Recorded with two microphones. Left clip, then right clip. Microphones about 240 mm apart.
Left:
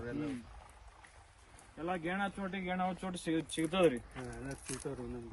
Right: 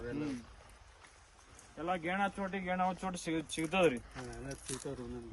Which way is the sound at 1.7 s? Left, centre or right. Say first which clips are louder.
Right 2 dB; centre.